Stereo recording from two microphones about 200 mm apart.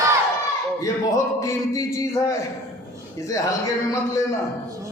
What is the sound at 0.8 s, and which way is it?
A man's voice, 15° left (ahead or behind).